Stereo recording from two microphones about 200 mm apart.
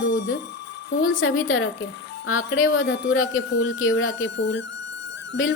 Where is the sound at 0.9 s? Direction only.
90° left.